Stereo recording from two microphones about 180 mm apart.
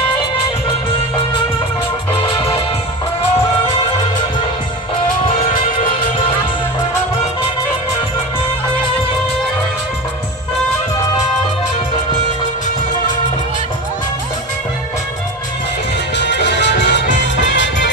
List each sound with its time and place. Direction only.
16.2 s music: 75° left (ahead or behind)
17.4 s music: 85° left